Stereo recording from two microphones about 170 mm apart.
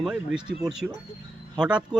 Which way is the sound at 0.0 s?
5° right (ahead or behind).